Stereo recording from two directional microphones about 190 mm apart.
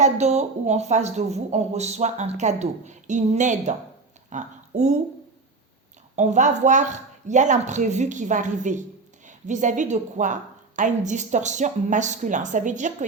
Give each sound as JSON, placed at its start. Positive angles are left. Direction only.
{"t": 0.0, "sound": "a woman's voice", "side_deg": -35}
{"t": 6.1, "sound": "a woman's voice", "side_deg": -40}